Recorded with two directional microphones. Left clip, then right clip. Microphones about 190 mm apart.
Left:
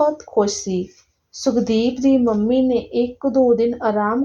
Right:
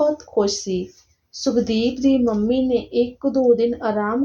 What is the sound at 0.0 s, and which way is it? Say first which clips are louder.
A woman's voice: left 1 dB; 40° left (ahead or behind).